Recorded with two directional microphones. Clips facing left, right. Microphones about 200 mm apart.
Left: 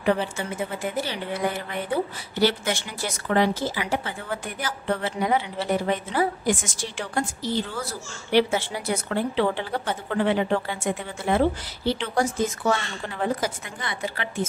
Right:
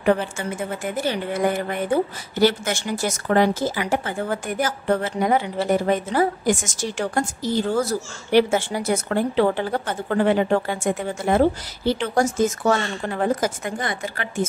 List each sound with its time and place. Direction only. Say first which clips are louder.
0.4 s speech: right 2 dB; 45° right (ahead or behind)